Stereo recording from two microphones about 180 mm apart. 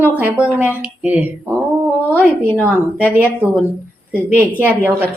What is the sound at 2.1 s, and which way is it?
Speech, 10° left (ahead or behind).